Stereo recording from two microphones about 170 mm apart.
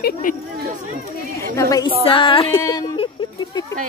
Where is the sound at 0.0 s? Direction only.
50° left (ahead or behind).